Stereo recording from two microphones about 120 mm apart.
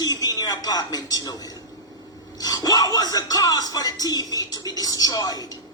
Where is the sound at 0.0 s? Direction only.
30° left (ahead or behind).